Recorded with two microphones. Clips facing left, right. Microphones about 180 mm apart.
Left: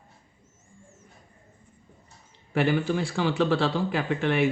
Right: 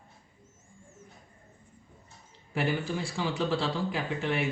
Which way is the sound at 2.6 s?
70° left (ahead or behind).